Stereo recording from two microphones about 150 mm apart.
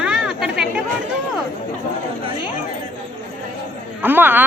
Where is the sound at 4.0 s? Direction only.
15° right (ahead or behind).